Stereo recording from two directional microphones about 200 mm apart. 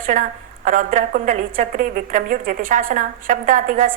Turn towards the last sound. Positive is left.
turn(degrees=-40)  # may be behind; listen again after turning